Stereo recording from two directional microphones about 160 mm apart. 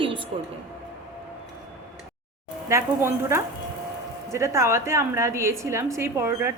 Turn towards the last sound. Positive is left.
turn(degrees=-15)  # may be behind; listen again after turning